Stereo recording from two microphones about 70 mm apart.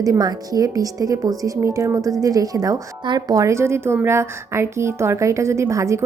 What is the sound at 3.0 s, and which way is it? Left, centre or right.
Speech, right.